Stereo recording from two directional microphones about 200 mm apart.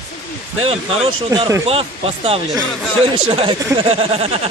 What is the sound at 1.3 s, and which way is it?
Speech, 15° right (ahead or behind).